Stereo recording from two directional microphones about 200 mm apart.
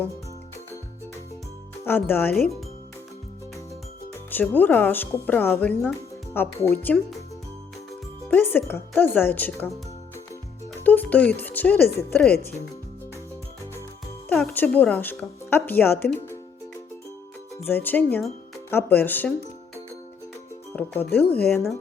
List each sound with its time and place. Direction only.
1.8 s speech: 10° left (ahead or behind)
4.3 s speech: 10° left (ahead or behind)
8.3 s speech: 10° left (ahead or behind)
10.8 s speech: 10° left (ahead or behind)
12.3 s speech: 50° left (ahead or behind)
14.3 s speech: 10° left (ahead or behind)
17.7 s speech: 10° left (ahead or behind)
20.7 s speech: 10° left (ahead or behind)